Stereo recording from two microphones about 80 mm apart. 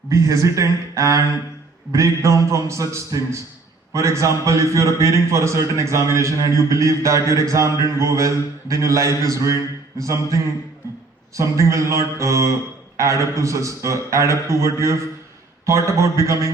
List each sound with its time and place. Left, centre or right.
0.1 s a man's voice: right